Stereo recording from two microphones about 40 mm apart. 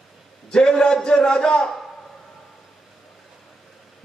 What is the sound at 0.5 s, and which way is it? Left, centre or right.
A man's voice, left.